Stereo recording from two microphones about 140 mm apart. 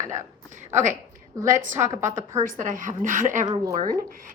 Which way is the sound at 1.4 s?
20° right (ahead or behind).